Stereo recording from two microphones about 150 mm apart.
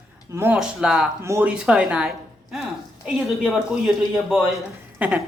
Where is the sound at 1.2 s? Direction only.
20° right (ahead or behind).